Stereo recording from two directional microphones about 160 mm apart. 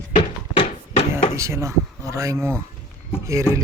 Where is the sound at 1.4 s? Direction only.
20° right (ahead or behind).